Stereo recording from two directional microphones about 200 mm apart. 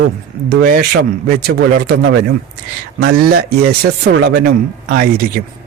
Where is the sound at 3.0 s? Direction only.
55° right (ahead or behind).